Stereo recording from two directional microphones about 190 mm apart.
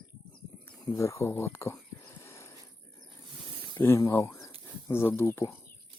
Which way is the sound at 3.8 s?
15° left (ahead or behind).